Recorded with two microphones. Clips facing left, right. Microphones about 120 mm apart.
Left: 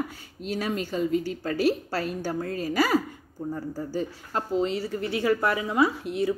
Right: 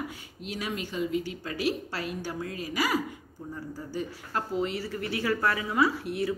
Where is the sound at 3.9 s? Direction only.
25° left (ahead or behind).